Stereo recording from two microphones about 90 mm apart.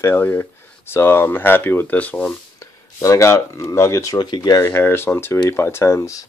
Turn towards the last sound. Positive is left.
turn(degrees=30)  # may be behind; listen again after turning